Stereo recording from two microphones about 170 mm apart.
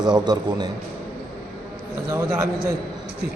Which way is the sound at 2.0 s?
15° right (ahead or behind).